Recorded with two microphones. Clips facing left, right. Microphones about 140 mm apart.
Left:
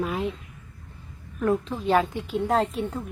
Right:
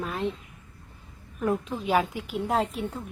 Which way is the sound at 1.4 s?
10° right (ahead or behind).